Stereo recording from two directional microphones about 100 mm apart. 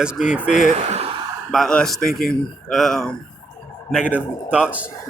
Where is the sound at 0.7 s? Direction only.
90° right.